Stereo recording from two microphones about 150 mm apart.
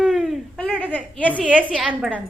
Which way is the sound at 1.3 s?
10° right (ahead or behind).